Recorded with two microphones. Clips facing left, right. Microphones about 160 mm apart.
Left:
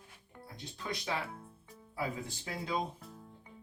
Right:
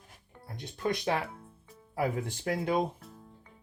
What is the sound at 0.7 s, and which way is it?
Speech, 55° right (ahead or behind).